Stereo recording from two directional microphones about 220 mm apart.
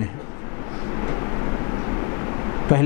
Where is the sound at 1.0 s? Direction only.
20° left (ahead or behind).